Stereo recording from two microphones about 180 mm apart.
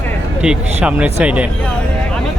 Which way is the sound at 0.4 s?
5° right (ahead or behind).